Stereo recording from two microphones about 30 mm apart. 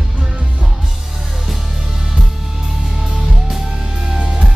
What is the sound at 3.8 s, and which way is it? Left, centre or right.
Music, right.